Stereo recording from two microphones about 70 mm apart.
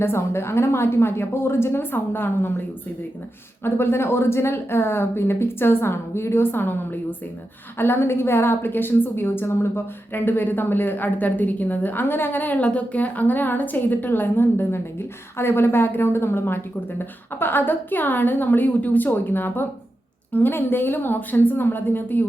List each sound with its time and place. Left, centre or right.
0.0 s a woman's voice: left
3.6 s a woman's voice: left